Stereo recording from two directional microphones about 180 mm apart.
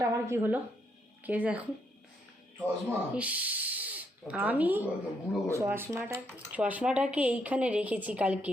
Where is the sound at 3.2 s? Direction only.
10° right (ahead or behind).